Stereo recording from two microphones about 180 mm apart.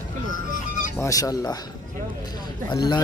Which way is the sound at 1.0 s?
20° left (ahead or behind).